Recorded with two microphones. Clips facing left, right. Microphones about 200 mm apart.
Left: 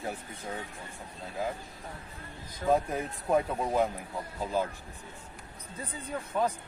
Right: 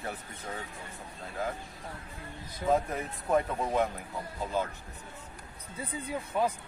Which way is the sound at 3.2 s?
10° left (ahead or behind).